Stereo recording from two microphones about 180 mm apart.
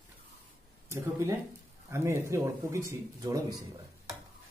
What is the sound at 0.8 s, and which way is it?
Speech, 15° right (ahead or behind).